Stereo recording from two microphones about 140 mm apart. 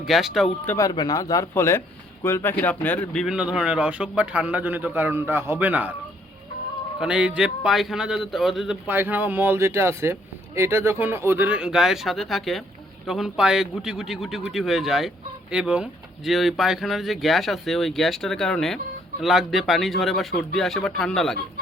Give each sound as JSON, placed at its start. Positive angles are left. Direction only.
{"t": 0.0, "sound": "speech", "side_deg": 0}
{"t": 0.8, "sound": "speech", "side_deg": 25}
{"t": 3.2, "sound": "speech", "side_deg": -5}
{"t": 7.0, "sound": "speech", "side_deg": -5}
{"t": 8.9, "sound": "speech", "side_deg": -15}